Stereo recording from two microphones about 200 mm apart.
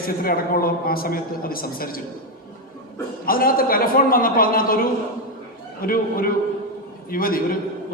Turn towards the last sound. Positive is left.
turn(degrees=45)  # may be behind; listen again after turning